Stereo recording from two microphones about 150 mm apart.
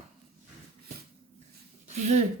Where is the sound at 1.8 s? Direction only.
50° right (ahead or behind).